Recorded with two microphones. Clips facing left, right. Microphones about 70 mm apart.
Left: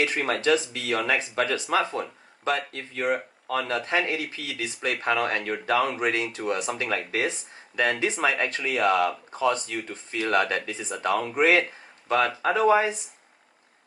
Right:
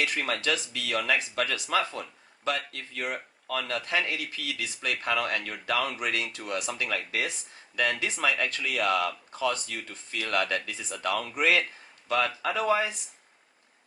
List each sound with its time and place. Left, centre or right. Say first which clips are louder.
0.0 s speech: left 4 dB; left